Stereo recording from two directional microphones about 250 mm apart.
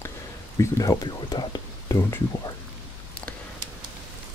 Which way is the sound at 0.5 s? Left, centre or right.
Centre.